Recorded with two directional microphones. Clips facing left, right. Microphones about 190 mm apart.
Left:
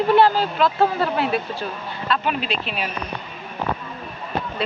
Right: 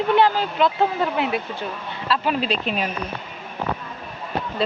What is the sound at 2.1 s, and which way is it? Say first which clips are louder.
Speech: right 2 dB; 35° right (ahead or behind).